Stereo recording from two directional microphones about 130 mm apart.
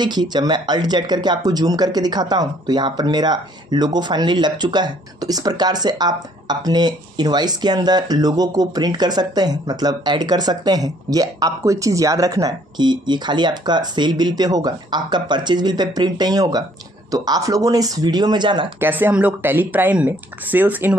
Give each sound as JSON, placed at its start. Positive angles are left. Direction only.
{"t": 0.0, "sound": "speech", "side_deg": -35}
{"t": 18.8, "sound": "speech", "side_deg": -15}